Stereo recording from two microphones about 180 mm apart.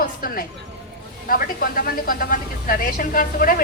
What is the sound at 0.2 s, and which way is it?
A man's voice, 55° left (ahead or behind).